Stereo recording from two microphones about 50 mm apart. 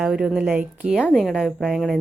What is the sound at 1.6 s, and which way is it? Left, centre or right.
Speech, centre.